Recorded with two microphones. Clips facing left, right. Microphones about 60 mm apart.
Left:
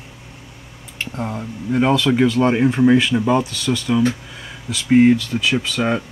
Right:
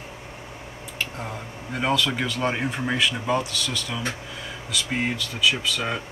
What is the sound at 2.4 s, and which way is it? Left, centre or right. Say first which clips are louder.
Speech: left 9 dB; centre.